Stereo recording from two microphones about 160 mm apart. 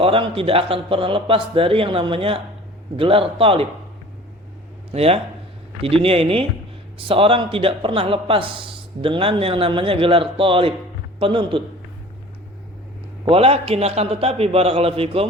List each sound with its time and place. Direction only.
0.0 s speech: 35° right (ahead or behind)
4.9 s speech: 40° right (ahead or behind)
13.2 s speech: 35° right (ahead or behind)